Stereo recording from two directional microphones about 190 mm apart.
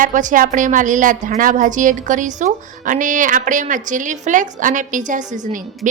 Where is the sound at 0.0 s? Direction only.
40° right (ahead or behind).